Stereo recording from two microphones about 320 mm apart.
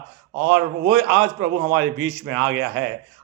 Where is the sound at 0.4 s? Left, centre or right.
Right.